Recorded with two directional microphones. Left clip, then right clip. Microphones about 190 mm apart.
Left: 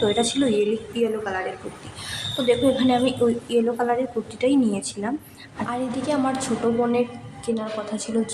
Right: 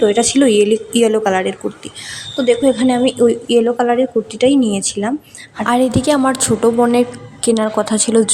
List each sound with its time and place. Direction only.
0.0 s a woman's voice: 35° right (ahead or behind); by 1.5 s 50° right (ahead or behind)
2.0 s a woman's voice: 25° right (ahead or behind)
5.6 s a woman's voice: 50° right (ahead or behind)